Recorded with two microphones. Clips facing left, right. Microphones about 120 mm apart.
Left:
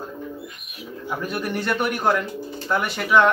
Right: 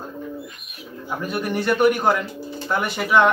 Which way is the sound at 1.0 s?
Centre (ahead or behind).